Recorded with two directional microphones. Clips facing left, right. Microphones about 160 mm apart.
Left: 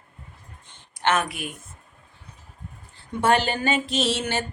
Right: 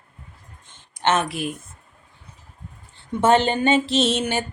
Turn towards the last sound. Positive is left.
turn(degrees=-15)  # may be behind; listen again after turning